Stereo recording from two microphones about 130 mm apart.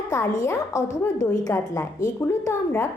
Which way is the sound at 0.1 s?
25° left (ahead or behind).